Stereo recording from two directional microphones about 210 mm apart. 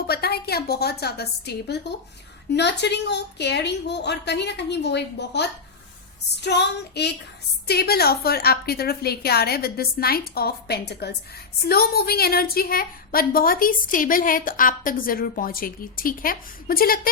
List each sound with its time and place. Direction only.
0.1 s a woman's voice: 50° left (ahead or behind)